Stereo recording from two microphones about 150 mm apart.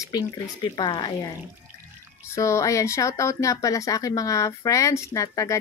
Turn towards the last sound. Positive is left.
turn(degrees=20)  # may be behind; listen again after turning